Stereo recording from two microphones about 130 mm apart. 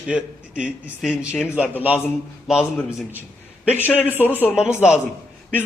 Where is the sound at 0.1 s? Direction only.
10° right (ahead or behind).